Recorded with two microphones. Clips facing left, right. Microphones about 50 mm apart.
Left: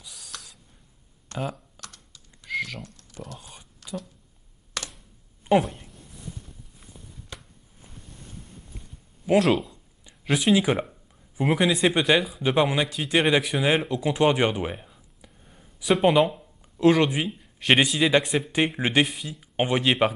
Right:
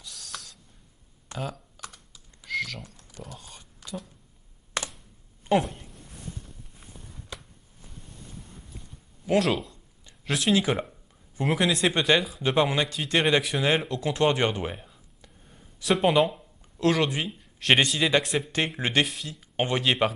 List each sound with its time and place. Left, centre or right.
0.0 s owl: centre
1.3 s speech: centre
1.8 s computer keyboard: centre
2.4 s typing: centre
2.8 s a sound: centre
3.3 s a sound: centre
4.7 s computer keyboard: right
5.6 s speech: centre
9.4 s speech: centre